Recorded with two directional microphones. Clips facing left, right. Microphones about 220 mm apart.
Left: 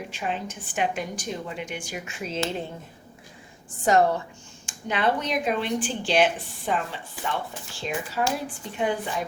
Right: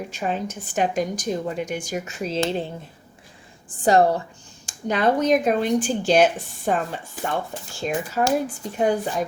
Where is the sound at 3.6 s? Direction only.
35° right (ahead or behind).